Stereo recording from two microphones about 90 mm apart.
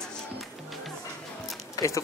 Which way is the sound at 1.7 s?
35° left (ahead or behind).